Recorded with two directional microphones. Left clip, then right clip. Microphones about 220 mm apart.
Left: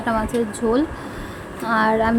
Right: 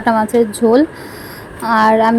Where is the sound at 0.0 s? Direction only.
25° right (ahead or behind).